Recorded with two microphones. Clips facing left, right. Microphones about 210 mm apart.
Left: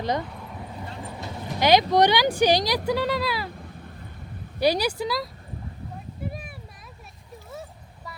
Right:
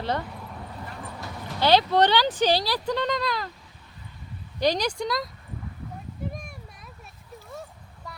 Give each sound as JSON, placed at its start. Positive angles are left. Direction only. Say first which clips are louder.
{"t": 0.0, "sound": "speech", "louder": "left 2 dB", "side_deg": 15}
{"t": 0.3, "sound": "speech", "louder": "left 1 dB", "side_deg": 0}
{"t": 3.5, "sound": "a sound", "louder": "left 11 dB", "side_deg": 55}
{"t": 4.6, "sound": "speech", "louder": "left 2 dB", "side_deg": 10}